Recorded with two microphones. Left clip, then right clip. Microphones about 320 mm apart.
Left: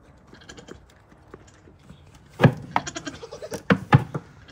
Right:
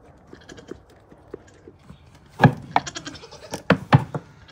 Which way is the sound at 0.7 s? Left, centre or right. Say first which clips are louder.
Right 5 dB; right.